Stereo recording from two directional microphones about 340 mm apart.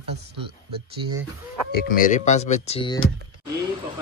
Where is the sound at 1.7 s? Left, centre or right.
Left.